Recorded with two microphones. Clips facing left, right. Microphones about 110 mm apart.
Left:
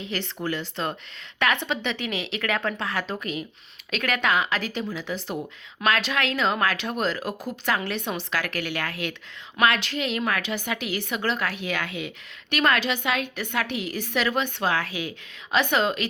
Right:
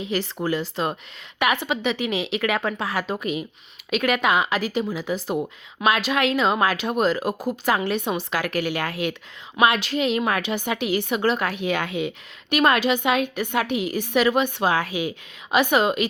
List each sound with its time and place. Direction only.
0.0 s a woman's voice: 15° right (ahead or behind)